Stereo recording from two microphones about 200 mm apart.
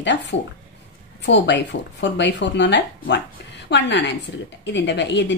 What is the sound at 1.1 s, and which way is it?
A woman's voice, 60° left (ahead or behind).